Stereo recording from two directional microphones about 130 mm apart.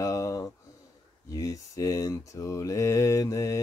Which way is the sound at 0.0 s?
25° left (ahead or behind).